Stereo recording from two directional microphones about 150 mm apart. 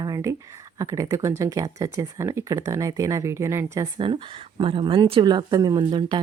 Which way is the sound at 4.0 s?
35° right (ahead or behind).